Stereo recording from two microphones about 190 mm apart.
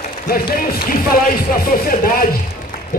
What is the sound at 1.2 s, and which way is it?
A man's voice, 50° left (ahead or behind).